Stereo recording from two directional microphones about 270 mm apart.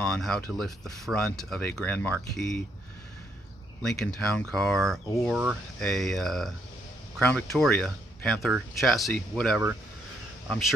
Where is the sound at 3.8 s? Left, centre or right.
Centre.